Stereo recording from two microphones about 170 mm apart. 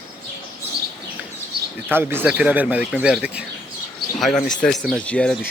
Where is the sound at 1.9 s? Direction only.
15° right (ahead or behind); by 5.4 s 5° left (ahead or behind).